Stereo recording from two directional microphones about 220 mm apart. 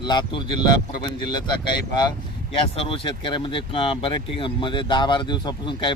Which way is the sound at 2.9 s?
25° left (ahead or behind).